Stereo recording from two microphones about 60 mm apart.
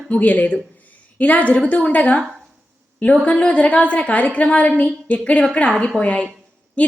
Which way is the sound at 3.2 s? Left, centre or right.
Centre.